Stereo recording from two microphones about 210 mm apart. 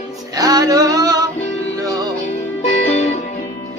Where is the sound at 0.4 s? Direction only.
15° right (ahead or behind).